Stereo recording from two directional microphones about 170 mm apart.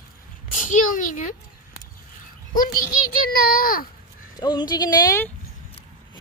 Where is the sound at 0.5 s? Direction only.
50° left (ahead or behind).